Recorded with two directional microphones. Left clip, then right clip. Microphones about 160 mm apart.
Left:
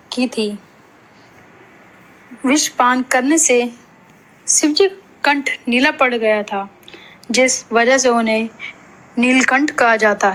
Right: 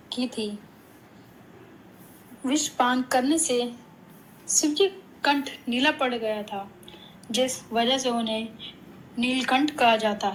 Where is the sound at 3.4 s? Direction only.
50° left (ahead or behind).